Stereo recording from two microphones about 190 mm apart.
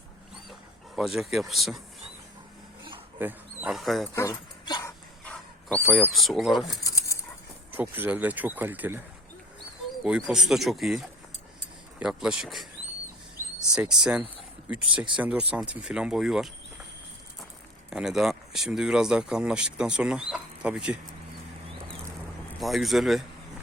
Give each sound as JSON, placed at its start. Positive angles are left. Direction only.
{"t": 0.9, "sound": "speech", "side_deg": 0}
{"t": 3.2, "sound": "speech", "side_deg": -10}
{"t": 4.1, "sound": "dog", "side_deg": 15}
{"t": 5.2, "sound": "speech", "side_deg": 5}
{"t": 6.8, "sound": "a sound", "side_deg": 15}
{"t": 7.7, "sound": "speech", "side_deg": -10}
{"t": 10.0, "sound": "speech", "side_deg": -5}
{"t": 17.9, "sound": "speech", "side_deg": 0}
{"t": 22.6, "sound": "speech", "side_deg": 0}